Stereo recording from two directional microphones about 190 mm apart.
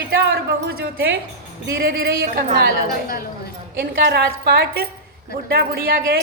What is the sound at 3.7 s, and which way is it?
A woman's voice, 60° right (ahead or behind).